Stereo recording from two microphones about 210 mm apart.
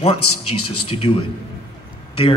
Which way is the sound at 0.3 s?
90° left.